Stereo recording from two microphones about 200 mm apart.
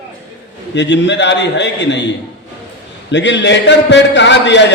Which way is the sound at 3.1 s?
60° left (ahead or behind).